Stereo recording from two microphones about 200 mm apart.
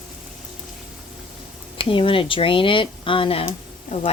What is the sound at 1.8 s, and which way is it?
Speech, 25° left (ahead or behind).